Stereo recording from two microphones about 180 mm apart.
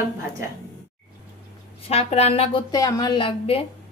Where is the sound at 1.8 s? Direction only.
35° left (ahead or behind).